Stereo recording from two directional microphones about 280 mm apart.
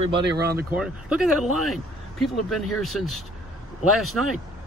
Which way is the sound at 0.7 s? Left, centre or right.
Centre.